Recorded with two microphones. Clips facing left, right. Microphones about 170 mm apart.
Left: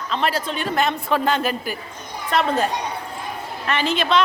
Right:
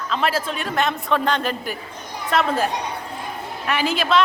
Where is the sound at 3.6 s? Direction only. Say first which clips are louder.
Even; 10° right (ahead or behind).